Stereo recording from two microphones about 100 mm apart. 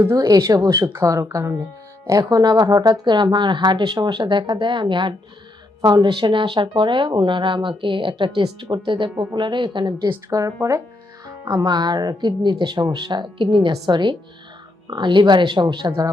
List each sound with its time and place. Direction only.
0.0 s a woman's voice: 35° right (ahead or behind)
10.2 s speech: 35° right (ahead or behind); by 15.9 s 50° right (ahead or behind)